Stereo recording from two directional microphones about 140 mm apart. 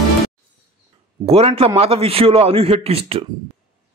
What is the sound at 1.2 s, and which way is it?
A man's voice, 50° right (ahead or behind).